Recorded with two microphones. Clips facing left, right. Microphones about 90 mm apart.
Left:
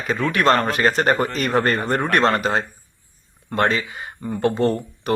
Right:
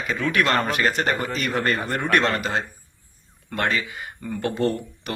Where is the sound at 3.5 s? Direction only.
30° left (ahead or behind).